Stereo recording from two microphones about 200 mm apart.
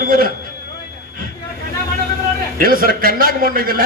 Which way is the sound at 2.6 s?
45° right (ahead or behind).